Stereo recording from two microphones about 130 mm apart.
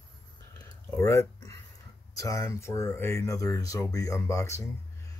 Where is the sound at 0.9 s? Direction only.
25° left (ahead or behind).